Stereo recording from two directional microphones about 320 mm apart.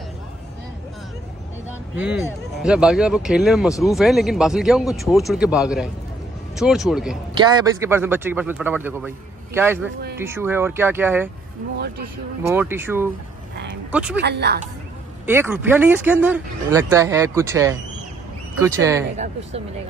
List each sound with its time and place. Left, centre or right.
2.0 s speech: centre
12.4 s speech: centre
14.2 s a woman's voice: right
15.2 s speech: centre
19.1 s speech: right